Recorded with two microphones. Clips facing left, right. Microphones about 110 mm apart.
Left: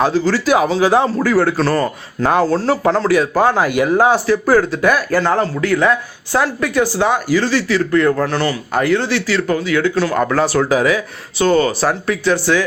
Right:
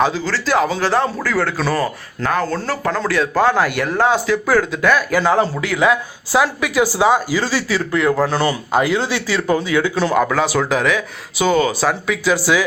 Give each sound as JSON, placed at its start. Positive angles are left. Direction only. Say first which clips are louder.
{"t": 0.3, "sound": "speech", "louder": "left 3 dB", "side_deg": 10}
{"t": 1.5, "sound": "speech", "louder": "left 3 dB", "side_deg": -5}
{"t": 2.2, "sound": "speech", "louder": "left 5 dB", "side_deg": 10}
{"t": 2.6, "sound": "a man's voice", "louder": "left 6 dB", "side_deg": 25}
{"t": 3.1, "sound": "speech", "louder": "right 1 dB", "side_deg": 10}
{"t": 5.2, "sound": "speech", "louder": "even", "side_deg": -10}
{"t": 10.2, "sound": "speech", "louder": "left 3 dB", "side_deg": 0}